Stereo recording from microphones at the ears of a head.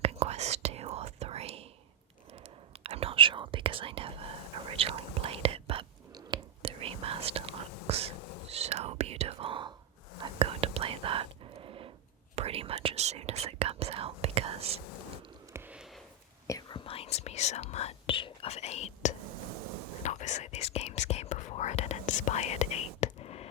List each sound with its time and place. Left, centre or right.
0.0 s whispering: right
2.8 s whispering: right
8.1 s whispering: left
8.4 s whispering: right
16.6 s whispering: left
19.2 s a sound: right
20.1 s whispering: left
23.0 s a sound: left